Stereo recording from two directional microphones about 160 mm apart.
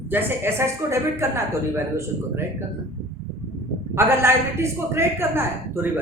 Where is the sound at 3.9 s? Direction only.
15° right (ahead or behind).